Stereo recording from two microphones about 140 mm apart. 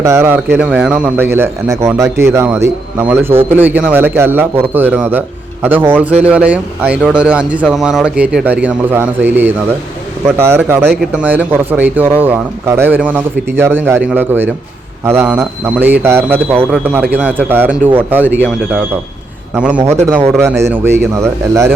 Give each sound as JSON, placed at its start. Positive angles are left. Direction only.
{"t": 0.0, "sound": "speech", "side_deg": -20}
{"t": 19.5, "sound": "speech", "side_deg": -10}